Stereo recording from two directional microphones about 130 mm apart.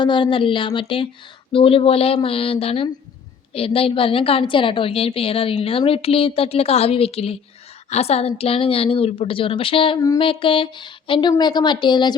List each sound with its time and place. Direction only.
0.0 s a woman's voice: 40° left (ahead or behind)